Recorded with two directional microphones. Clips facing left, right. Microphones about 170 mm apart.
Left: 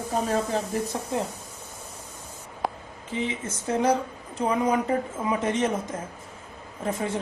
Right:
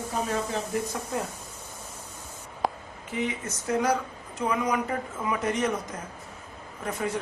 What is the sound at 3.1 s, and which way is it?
A woman's voice, 25° left (ahead or behind).